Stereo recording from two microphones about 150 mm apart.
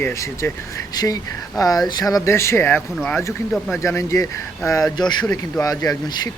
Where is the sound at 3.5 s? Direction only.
Centre (ahead or behind).